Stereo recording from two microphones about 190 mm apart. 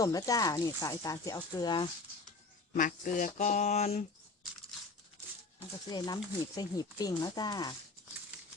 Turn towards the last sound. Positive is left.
turn(degrees=20)  # may be behind; listen again after turning